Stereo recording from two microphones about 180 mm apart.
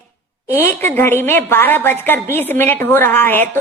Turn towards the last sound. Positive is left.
turn(degrees=10)  # may be behind; listen again after turning